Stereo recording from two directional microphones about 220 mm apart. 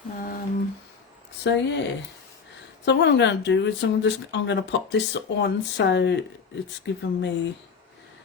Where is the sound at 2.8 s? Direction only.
55° left (ahead or behind).